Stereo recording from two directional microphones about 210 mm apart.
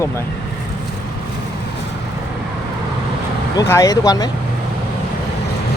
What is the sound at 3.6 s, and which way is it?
Speech, 15° left (ahead or behind).